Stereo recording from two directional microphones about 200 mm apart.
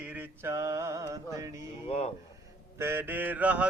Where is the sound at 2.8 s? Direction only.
10° right (ahead or behind).